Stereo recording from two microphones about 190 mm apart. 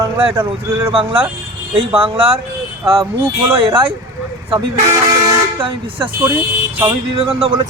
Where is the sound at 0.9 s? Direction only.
30° right (ahead or behind).